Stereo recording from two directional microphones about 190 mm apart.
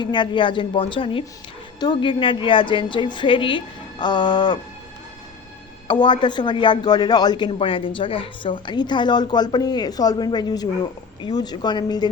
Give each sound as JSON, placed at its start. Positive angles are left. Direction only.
{"t": 0.0, "sound": "speech", "side_deg": 25}
{"t": 5.9, "sound": "speech", "side_deg": 25}